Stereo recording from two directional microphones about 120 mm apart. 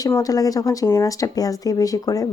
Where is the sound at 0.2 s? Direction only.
30° left (ahead or behind).